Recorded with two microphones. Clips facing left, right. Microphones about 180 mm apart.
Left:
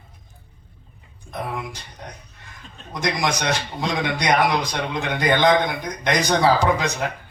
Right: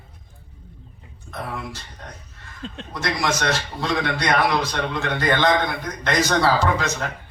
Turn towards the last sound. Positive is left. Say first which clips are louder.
# left 2 dB
turn(degrees=15)  # may be behind; listen again after turning